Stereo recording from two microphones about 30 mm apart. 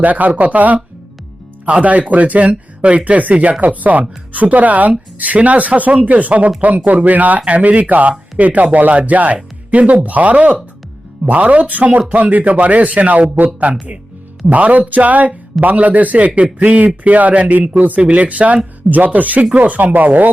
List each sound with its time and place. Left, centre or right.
0.0 s a man's voice: right
2.8 s a man's voice: right
7.4 s a man's voice: right
8.9 s a man's voice: right
17.7 s speech: right
18.0 s a man's voice: right